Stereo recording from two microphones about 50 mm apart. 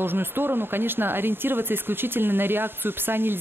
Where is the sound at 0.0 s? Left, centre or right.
Right.